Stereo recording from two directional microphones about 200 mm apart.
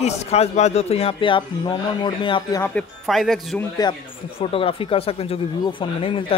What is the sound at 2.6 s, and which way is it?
Speech, 5° left (ahead or behind).